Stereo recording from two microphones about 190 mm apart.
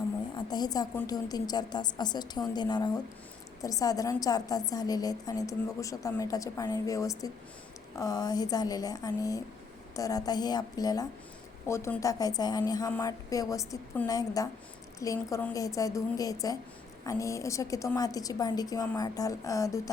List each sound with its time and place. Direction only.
0.3 s a woman's voice: 20° left (ahead or behind)